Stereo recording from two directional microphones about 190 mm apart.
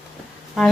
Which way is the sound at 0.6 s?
Centre (ahead or behind).